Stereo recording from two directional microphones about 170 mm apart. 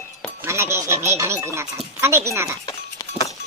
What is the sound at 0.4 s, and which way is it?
Speech, 15° right (ahead or behind).